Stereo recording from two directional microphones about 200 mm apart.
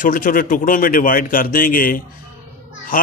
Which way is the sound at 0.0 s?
45° left (ahead or behind).